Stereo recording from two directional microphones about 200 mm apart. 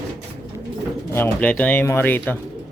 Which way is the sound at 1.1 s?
10° left (ahead or behind).